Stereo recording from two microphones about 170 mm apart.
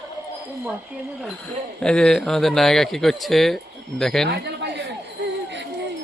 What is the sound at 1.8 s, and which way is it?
Speech, 5° left (ahead or behind).